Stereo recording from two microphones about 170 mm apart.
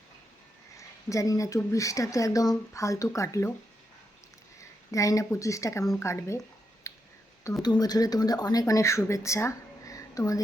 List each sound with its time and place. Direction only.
0.8 s speech: 20° left (ahead or behind)
4.9 s speech: 20° left (ahead or behind)
6.8 s a sound: 15° left (ahead or behind)
7.6 s speech: 25° left (ahead or behind)